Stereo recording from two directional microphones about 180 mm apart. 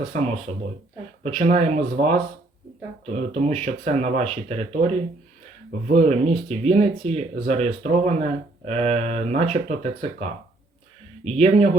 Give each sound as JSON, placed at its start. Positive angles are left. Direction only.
{"t": 1.2, "sound": "speech", "side_deg": -35}
{"t": 11.3, "sound": "speech", "side_deg": -35}